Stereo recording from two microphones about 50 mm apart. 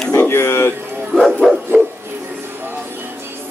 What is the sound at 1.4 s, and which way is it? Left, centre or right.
Dog, centre.